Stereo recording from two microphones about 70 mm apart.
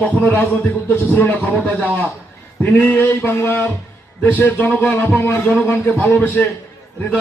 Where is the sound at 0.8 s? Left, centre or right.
Left.